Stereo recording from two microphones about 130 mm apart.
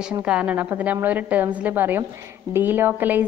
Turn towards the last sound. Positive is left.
turn(degrees=-15)  # may be behind; listen again after turning